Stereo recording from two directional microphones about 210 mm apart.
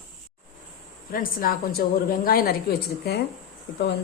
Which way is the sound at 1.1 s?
45° left (ahead or behind).